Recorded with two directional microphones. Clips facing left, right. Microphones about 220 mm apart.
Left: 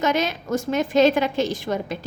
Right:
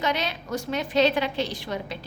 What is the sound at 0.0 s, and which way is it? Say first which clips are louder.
A woman's voice: left 5 dB; 45° left (ahead or behind).